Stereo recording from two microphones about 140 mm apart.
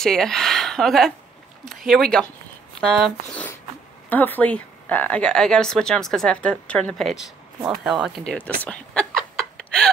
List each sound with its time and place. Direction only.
0.0 s speech: 5° left (ahead or behind)
4.1 s a woman's voice: 15° left (ahead or behind)
8.6 s chuckle: 5° left (ahead or behind)